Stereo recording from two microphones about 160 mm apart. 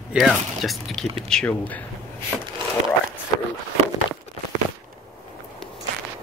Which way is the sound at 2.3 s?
Centre (ahead or behind).